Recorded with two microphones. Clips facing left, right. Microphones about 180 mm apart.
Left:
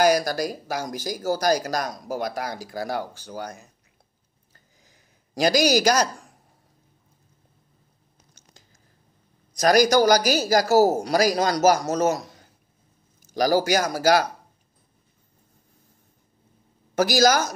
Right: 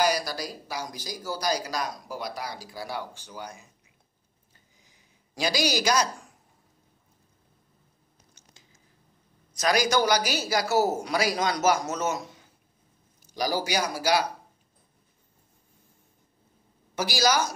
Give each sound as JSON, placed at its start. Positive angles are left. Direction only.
{"t": 0.0, "sound": "speech", "side_deg": 45}
{"t": 5.3, "sound": "speech", "side_deg": 45}
{"t": 8.3, "sound": "a sound", "side_deg": 40}
{"t": 9.6, "sound": "speech", "side_deg": 40}
{"t": 16.9, "sound": "speech", "side_deg": 45}